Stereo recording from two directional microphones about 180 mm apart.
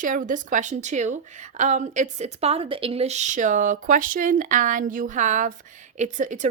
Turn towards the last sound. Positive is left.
turn(degrees=-45)  # may be behind; listen again after turning